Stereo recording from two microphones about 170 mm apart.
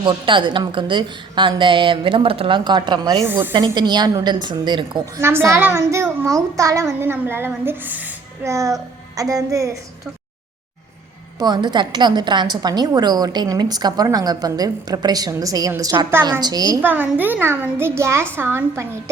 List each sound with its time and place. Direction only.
0.0 s a woman's voice: 30° right (ahead or behind)
3.2 s a child's voice: 10° right (ahead or behind)
3.5 s a woman's voice: 25° right (ahead or behind)
5.2 s a child's voice: 15° right (ahead or behind)
11.3 s a woman's voice: 25° right (ahead or behind)
16.8 s a child's voice: 10° right (ahead or behind)